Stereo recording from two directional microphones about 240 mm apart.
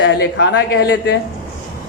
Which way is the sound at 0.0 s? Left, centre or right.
Left.